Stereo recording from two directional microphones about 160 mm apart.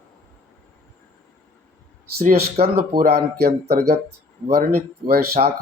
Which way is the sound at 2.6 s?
70° right (ahead or behind).